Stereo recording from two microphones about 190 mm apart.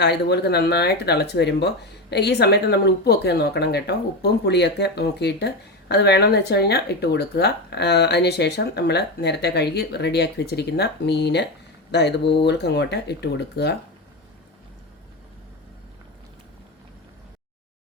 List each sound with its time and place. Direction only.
0.0 s speech: 60° left (ahead or behind)